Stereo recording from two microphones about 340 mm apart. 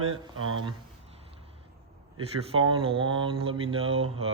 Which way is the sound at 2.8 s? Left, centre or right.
Centre.